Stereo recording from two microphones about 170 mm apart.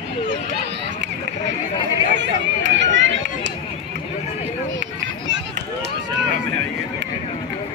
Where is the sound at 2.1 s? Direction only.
90° right.